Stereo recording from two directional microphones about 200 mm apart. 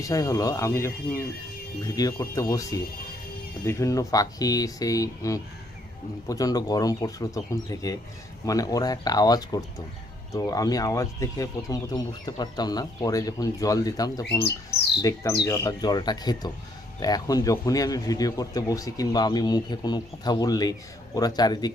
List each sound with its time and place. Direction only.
0.0 s a man's voice: 15° left (ahead or behind)
14.7 s bird: 15° left (ahead or behind)
15.4 s a man's voice: 15° left (ahead or behind)